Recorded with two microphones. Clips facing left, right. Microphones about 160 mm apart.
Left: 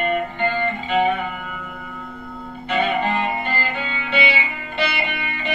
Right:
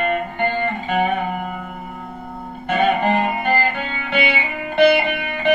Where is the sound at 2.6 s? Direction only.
50° right (ahead or behind).